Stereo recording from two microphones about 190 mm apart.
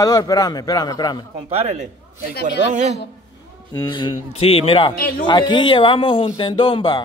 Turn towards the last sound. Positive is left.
turn(degrees=25)  # may be behind; listen again after turning